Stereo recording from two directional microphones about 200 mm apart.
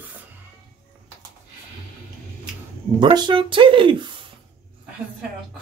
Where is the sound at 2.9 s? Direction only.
25° right (ahead or behind).